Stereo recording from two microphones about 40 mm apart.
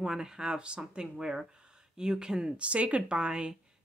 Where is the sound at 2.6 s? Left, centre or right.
Right.